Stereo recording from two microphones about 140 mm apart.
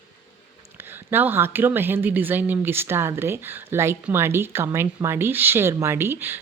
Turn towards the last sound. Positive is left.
turn(degrees=-15)  # may be behind; listen again after turning